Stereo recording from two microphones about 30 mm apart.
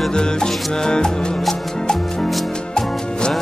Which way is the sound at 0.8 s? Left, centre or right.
Left.